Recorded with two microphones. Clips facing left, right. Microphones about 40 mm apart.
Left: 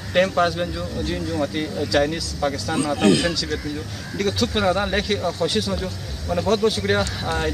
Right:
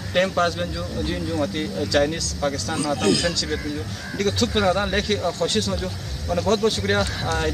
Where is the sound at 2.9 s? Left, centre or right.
Left.